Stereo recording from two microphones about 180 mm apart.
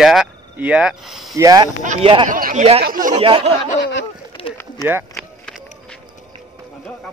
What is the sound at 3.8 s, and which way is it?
Speech, 85° left.